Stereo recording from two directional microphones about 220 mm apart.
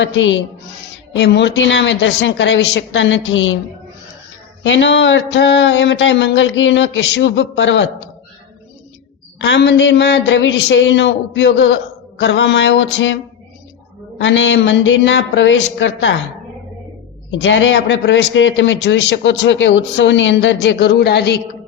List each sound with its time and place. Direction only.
0.0 s a man's voice: 60° left (ahead or behind)
4.6 s a man's voice: 55° left (ahead or behind)
9.4 s a man's voice: 55° left (ahead or behind)
14.2 s a man's voice: 55° left (ahead or behind)
17.4 s a man's voice: 55° left (ahead or behind)